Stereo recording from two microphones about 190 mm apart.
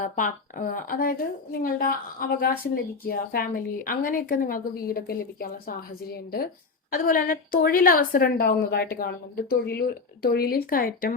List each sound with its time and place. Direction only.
0.0 s speech: 45° left (ahead or behind)